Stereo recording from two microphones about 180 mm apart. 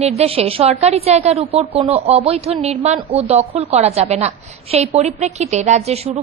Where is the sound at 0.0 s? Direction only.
35° right (ahead or behind).